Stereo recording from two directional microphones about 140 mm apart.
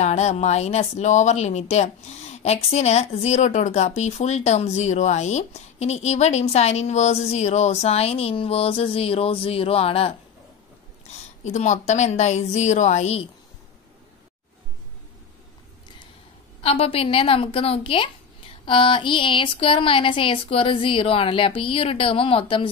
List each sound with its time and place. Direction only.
0.0 s speech: 55° left (ahead or behind)
11.1 s a woman's voice: 55° left (ahead or behind)
16.6 s a woman's voice: 45° left (ahead or behind)